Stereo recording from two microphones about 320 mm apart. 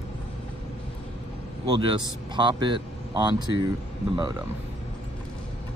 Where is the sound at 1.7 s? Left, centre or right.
Centre.